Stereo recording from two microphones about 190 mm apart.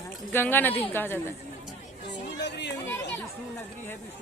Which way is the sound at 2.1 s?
65° left (ahead or behind).